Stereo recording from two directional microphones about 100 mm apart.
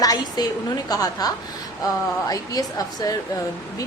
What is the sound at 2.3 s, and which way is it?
Speech, 40° left (ahead or behind).